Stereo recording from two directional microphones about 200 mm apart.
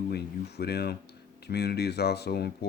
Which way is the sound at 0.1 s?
55° left (ahead or behind).